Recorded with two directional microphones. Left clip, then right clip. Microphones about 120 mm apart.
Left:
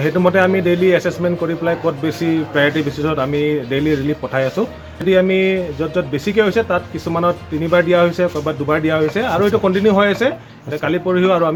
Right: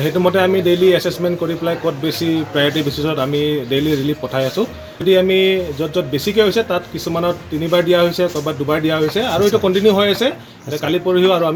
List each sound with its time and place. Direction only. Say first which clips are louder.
0.2 s a man's voice: even; 15° right (ahead or behind)